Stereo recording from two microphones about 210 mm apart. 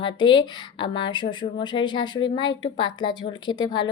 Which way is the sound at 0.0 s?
20° left (ahead or behind).